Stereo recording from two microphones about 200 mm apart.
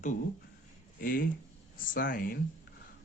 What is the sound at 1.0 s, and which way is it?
Speech, 45° left (ahead or behind).